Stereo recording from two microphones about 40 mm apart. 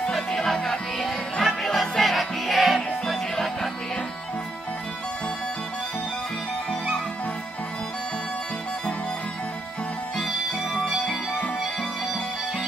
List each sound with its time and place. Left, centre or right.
0.4 s music: centre